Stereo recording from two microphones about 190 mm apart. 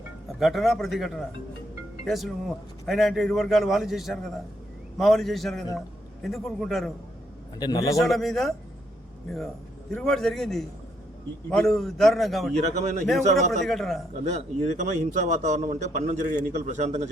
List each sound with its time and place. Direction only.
0.3 s a man's voice: centre (ahead or behind)
7.6 s a man's voice: 20° left (ahead or behind)
7.9 s a man's voice: centre (ahead or behind)
12.8 s a man's voice: 40° right (ahead or behind)
13.7 s a man's voice: centre (ahead or behind)
14.3 s a man's voice: 35° right (ahead or behind)